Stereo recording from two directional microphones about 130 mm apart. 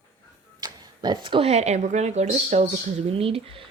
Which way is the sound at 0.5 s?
30° right (ahead or behind).